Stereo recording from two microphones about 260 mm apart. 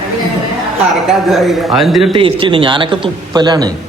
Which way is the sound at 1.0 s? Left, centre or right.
Centre.